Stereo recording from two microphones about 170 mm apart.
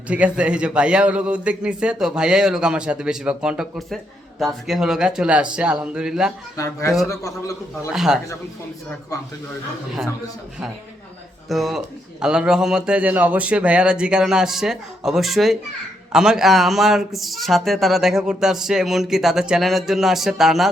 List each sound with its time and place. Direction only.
0.1 s a man's voice: 5° right (ahead or behind)
6.6 s a man's voice: 15° left (ahead or behind)
7.9 s a man's voice: 5° right (ahead or behind)
11.4 s a man's voice: centre (ahead or behind)